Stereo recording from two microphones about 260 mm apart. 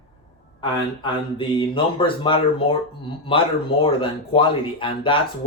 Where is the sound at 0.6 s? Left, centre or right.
Centre.